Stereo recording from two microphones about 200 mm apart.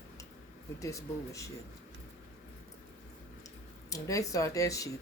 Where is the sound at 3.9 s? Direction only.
15° left (ahead or behind).